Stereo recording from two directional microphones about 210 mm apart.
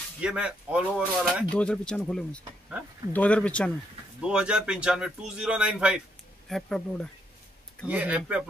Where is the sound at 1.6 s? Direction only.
5° left (ahead or behind).